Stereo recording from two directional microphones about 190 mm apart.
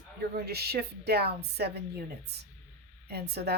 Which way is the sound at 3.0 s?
60° right (ahead or behind).